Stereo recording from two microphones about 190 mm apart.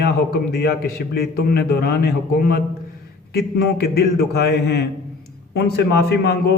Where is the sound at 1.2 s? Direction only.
55° left (ahead or behind).